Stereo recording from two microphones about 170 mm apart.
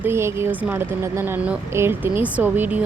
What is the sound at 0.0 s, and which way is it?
A woman's voice, 15° right (ahead or behind).